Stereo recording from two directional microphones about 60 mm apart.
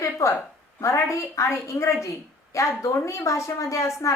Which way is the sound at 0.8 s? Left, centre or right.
Left.